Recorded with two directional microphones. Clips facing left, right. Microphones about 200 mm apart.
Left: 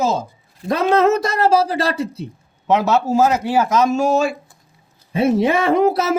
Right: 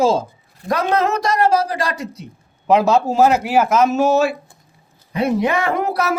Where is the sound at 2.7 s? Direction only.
10° right (ahead or behind).